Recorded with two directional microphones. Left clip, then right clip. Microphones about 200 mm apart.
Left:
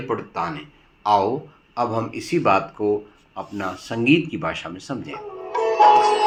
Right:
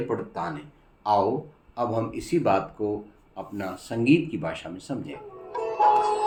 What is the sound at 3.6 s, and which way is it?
Speech, 5° left (ahead or behind).